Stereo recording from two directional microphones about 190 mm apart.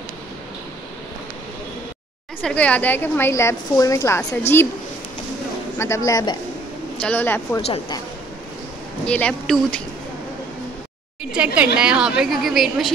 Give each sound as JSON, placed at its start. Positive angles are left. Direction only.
{"t": 2.4, "sound": "a woman's voice", "side_deg": 5}
{"t": 5.8, "sound": "a woman's voice", "side_deg": 15}
{"t": 7.6, "sound": "a woman's voice", "side_deg": 30}
{"t": 9.0, "sound": "speech", "side_deg": 5}
{"t": 11.3, "sound": "speech", "side_deg": -5}